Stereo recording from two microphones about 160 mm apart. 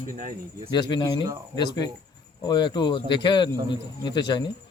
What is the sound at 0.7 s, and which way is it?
Speech, 30° left (ahead or behind).